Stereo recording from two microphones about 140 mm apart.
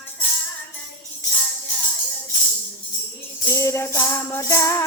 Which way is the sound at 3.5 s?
20° left (ahead or behind).